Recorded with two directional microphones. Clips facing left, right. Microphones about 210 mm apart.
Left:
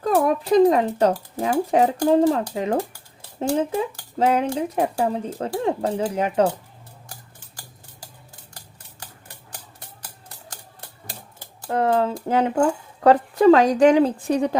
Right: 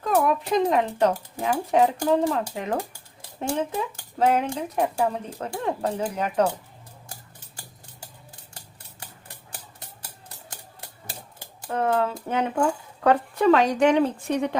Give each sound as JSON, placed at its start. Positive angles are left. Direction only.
{"t": 0.0, "sound": "speech", "side_deg": 35}
{"t": 4.3, "sound": "speech", "side_deg": 30}
{"t": 11.7, "sound": "speech", "side_deg": 35}